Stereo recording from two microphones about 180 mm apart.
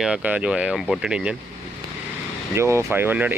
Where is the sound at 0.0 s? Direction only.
5° right (ahead or behind).